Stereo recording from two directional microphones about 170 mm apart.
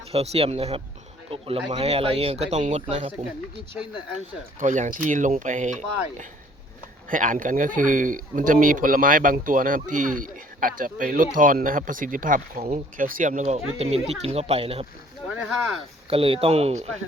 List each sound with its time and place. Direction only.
0.1 s speech: 35° right (ahead or behind)
4.6 s speech: 45° right (ahead or behind)
16.0 s speech: 35° right (ahead or behind)